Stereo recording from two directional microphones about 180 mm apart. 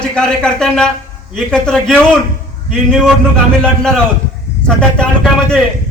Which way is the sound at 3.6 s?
5° left (ahead or behind).